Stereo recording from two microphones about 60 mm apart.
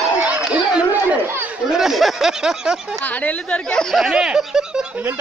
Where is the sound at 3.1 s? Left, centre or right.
Left.